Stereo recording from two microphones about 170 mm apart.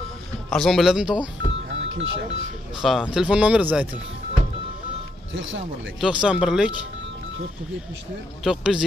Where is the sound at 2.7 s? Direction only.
Centre (ahead or behind).